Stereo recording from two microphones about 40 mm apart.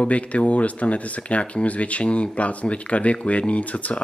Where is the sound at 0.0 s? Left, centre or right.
Left.